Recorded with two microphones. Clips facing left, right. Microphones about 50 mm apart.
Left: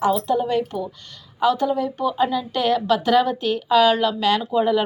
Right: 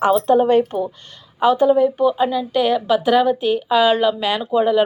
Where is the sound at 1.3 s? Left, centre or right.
Right.